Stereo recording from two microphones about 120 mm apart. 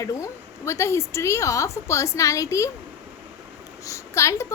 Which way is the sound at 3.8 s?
25° left (ahead or behind).